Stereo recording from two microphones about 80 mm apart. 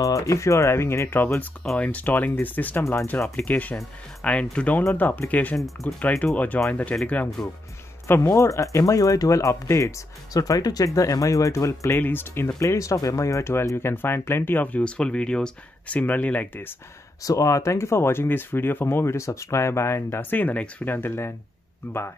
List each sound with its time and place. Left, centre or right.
0.0 s speech: left; by 5.6 s centre
5.6 s speech: centre
5.9 s speech: centre
8.3 s speech: left
12.0 s speech: left
12.5 s speech: left
17.2 s speech: left